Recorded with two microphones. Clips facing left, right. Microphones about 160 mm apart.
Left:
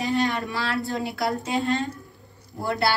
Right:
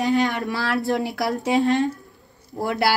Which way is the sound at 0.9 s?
80° right.